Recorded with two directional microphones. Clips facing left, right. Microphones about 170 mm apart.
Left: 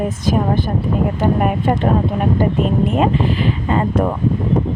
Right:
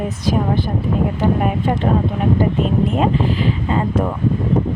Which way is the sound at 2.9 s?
60° left (ahead or behind).